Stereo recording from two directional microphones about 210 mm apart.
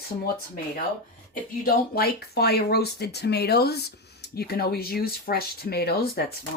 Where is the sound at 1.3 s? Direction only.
45° left (ahead or behind).